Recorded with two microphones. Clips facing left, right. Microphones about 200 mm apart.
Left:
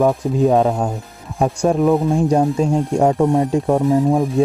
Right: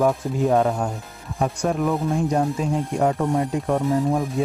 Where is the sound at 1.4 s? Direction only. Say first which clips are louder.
Left 6 dB; 30° left (ahead or behind).